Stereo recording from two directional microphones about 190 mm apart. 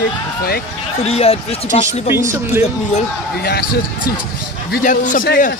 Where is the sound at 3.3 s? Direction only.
55° left (ahead or behind).